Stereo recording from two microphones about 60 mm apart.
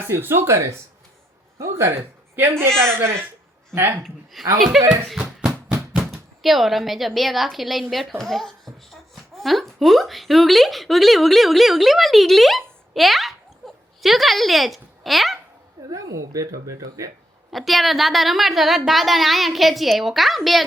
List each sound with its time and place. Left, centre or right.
0.1 s speech: right
1.5 s a sound: right
2.3 s speech: right
4.0 s a woman's voice: centre
8.2 s a sound: centre
9.7 s speech: centre
15.9 s speech: right
17.5 s a woman's voice: centre